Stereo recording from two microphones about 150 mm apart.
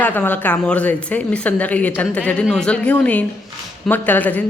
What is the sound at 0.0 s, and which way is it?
A woman's voice, 10° left (ahead or behind).